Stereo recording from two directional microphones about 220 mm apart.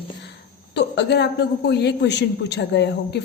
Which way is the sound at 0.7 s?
50° left (ahead or behind).